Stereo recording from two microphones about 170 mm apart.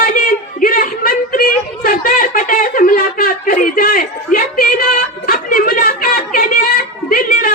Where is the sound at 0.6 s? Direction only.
55° left (ahead or behind).